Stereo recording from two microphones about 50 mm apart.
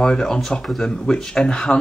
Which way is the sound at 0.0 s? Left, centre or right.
Centre.